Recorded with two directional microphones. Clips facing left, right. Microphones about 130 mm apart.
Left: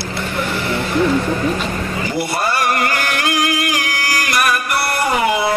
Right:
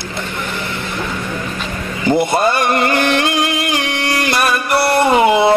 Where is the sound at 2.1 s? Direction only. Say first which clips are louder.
Right 8 dB; 20° right (ahead or behind).